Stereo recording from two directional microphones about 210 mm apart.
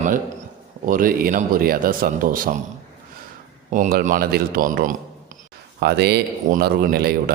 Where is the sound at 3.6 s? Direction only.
35° right (ahead or behind).